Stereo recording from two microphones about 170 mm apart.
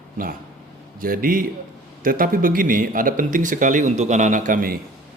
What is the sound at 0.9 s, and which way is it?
A man's voice, 55° right (ahead or behind).